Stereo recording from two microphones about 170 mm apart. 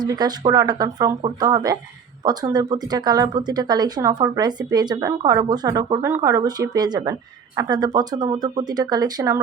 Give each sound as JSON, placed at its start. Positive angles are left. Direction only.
{"t": 0.0, "sound": "speech", "side_deg": -25}